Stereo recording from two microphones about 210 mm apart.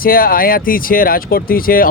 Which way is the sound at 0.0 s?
45° left (ahead or behind).